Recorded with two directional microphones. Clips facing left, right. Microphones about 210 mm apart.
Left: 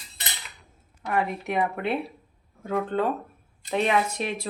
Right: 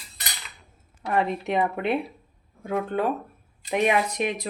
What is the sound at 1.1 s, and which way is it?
Speech, 25° right (ahead or behind).